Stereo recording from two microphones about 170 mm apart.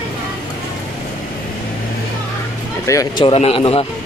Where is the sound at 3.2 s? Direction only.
35° left (ahead or behind).